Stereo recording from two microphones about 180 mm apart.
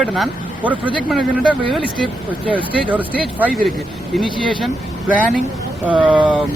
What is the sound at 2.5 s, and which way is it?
Speech, 30° right (ahead or behind).